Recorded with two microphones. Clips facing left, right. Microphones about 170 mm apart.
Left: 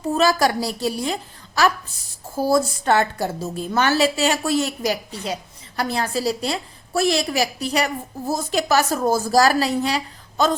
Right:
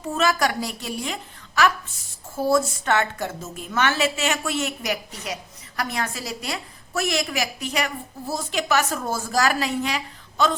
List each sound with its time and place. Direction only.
0.0 s a woman's voice: 35° left (ahead or behind)